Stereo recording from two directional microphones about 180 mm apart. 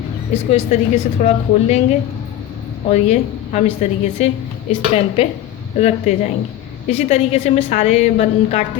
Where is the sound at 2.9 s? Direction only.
40° left (ahead or behind).